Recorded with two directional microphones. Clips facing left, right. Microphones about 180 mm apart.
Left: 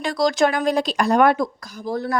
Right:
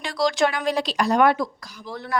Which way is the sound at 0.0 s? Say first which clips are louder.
Left 3 dB; 45° left (ahead or behind).